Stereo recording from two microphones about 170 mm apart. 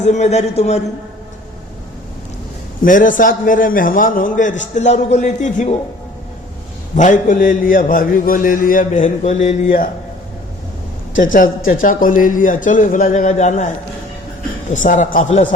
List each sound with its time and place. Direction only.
0.0 s a man's voice: 45° left (ahead or behind)
2.8 s a man's voice: 50° left (ahead or behind)
6.9 s a man's voice: 50° left (ahead or behind)
11.2 s a man's voice: 50° left (ahead or behind)
14.7 s a man's voice: 50° left (ahead or behind)